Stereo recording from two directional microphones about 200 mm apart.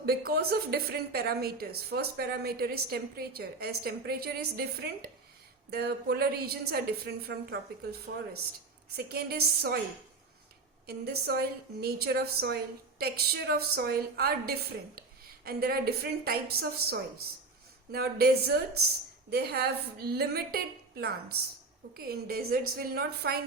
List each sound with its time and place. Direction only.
0.0 s a woman's voice: 50° right (ahead or behind)
9.0 s a woman's voice: 50° right (ahead or behind)
10.8 s a woman's voice: 55° right (ahead or behind)